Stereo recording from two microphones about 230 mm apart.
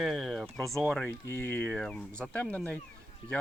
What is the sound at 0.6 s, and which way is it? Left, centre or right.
Speech, centre.